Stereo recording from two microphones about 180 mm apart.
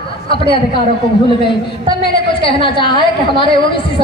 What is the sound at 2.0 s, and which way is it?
A woman's voice, 30° left (ahead or behind).